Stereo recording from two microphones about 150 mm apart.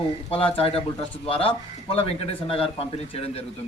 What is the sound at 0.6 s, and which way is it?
A man's voice, 40° left (ahead or behind).